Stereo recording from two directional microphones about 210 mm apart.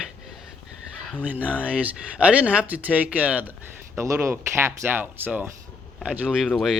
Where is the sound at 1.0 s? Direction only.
5° right (ahead or behind).